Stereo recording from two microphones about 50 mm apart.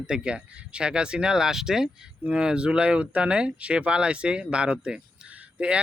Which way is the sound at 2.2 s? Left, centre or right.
Centre.